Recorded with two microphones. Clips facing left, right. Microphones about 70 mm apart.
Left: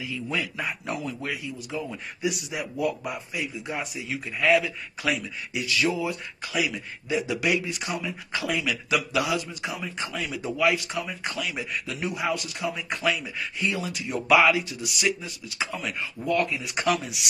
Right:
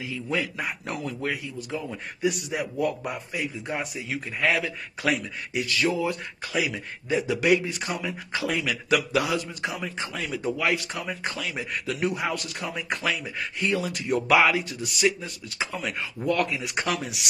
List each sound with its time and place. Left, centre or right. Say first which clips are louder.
0.0 s a man's voice: right 1 dB; right
0.8 s a man's voice: right 1 dB; right
9.9 s speech: even; right
10.3 s a man's voice: left 2 dB; right
11.2 s a man's voice: even; right
11.7 s a man's voice: right 3 dB; right
13.0 s a man's voice: left 4 dB; right
13.4 s a man's voice: right 2 dB; right
16.0 s speech: even; right
16.7 s a man's voice: left 4 dB; right